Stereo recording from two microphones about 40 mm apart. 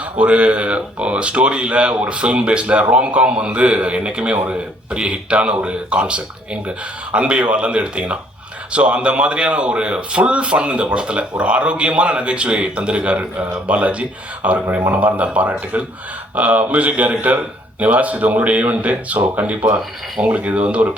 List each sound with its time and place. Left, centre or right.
0.2 s speech: right